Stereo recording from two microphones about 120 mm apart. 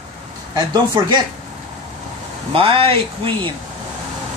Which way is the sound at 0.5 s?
40° right (ahead or behind).